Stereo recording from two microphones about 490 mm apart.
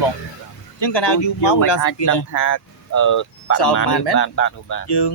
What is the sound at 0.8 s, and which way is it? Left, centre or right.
Speech, left.